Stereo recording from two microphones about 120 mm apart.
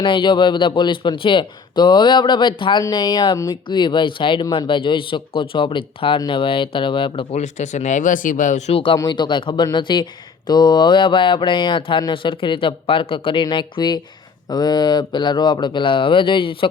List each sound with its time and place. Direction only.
0.0 s speech: 45° left (ahead or behind)
7.3 s speech: 75° left (ahead or behind)
8.7 s speech: 45° left (ahead or behind)
9.0 s speech: 35° left (ahead or behind)